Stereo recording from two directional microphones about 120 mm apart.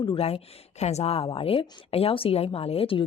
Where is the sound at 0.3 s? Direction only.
65° left (ahead or behind).